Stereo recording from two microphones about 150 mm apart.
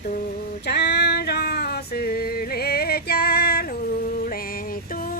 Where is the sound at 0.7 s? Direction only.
90° left.